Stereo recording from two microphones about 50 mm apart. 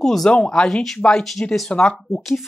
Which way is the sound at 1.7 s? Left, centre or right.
Centre.